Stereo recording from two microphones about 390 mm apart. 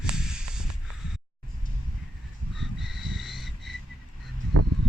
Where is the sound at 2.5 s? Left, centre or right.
Centre.